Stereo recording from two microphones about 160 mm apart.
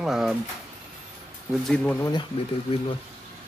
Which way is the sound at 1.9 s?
20° left (ahead or behind).